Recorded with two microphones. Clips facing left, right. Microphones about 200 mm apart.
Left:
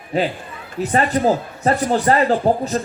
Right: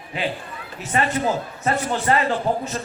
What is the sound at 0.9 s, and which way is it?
Speech, 35° left (ahead or behind).